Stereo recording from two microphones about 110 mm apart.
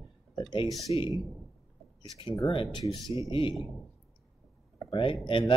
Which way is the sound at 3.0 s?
30° right (ahead or behind).